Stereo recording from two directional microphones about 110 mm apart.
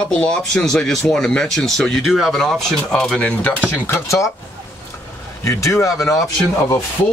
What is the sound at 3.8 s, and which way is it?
Speech, 25° left (ahead or behind).